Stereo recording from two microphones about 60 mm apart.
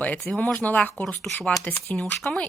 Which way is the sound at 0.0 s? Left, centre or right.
Left.